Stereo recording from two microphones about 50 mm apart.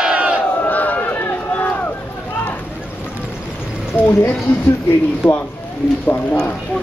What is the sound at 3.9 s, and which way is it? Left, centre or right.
Speech, left.